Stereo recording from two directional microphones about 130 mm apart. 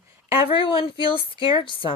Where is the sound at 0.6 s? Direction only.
40° left (ahead or behind).